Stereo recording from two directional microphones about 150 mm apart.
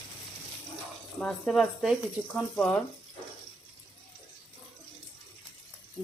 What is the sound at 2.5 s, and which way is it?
Speech, 5° left (ahead or behind).